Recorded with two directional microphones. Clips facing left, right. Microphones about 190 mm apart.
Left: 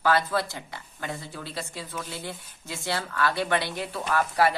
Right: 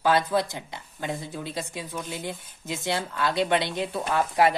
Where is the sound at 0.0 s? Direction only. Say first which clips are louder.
Right 2 dB; 20° right (ahead or behind).